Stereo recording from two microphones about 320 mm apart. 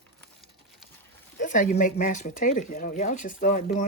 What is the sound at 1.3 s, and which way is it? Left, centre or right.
Speech, left.